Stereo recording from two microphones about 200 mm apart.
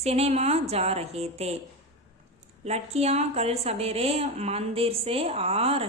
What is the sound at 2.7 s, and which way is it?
Speech, 30° right (ahead or behind).